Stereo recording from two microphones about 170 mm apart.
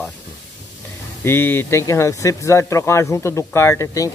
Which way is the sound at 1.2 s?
10° left (ahead or behind).